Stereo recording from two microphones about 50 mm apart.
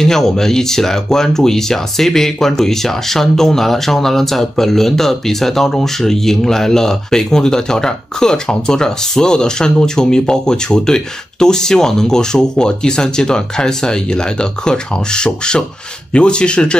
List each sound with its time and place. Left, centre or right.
0.0 s speech: centre